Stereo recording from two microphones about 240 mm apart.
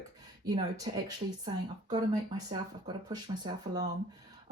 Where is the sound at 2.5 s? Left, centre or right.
Centre.